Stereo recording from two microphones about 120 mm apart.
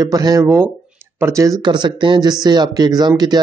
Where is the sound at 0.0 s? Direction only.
30° right (ahead or behind).